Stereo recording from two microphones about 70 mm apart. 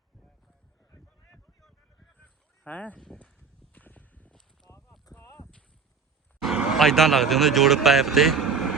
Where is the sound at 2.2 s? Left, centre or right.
Left.